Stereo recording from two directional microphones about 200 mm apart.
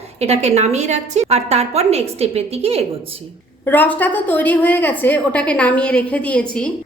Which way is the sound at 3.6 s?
10° left (ahead or behind).